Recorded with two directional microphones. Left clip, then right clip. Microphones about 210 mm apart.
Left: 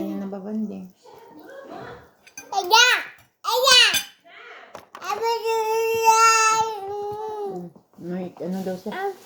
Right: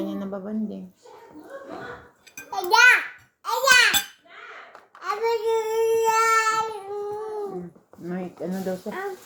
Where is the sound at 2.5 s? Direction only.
35° left (ahead or behind).